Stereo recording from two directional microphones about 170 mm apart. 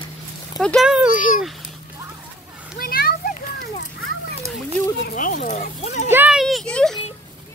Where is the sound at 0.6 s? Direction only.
Centre (ahead or behind).